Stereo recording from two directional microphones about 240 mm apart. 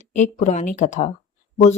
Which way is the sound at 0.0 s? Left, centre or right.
Left.